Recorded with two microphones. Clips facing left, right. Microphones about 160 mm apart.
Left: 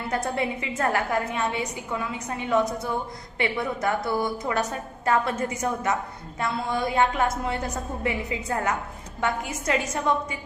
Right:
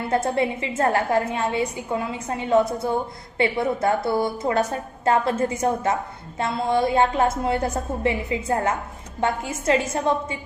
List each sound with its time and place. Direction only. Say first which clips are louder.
0.1 s a woman's voice: right 5 dB; 30° right (ahead or behind)